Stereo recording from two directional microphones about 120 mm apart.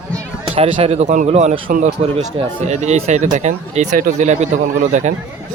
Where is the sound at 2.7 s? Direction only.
70° right (ahead or behind).